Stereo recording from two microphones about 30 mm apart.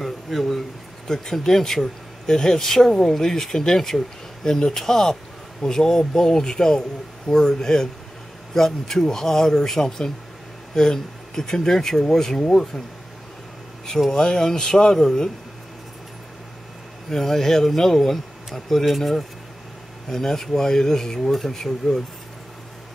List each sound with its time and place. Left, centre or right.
0.0 s a sound: centre
1.0 s speech: centre
14.1 s speech: left
17.1 s speech: centre
20.1 s speech: centre